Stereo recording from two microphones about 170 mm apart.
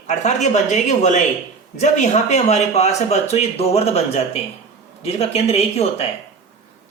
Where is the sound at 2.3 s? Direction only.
40° left (ahead or behind).